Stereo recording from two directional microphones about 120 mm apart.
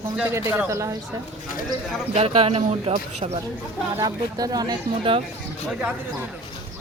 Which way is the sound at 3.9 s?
30° right (ahead or behind).